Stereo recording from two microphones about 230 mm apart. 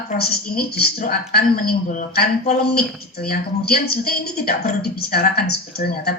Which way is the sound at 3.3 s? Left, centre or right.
Left.